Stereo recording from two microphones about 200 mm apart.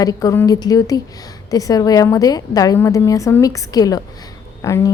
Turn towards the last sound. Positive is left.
turn(degrees=15)  # may be behind; listen again after turning